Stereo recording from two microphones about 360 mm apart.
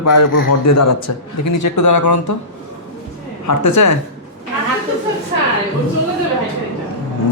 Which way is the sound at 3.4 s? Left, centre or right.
Left.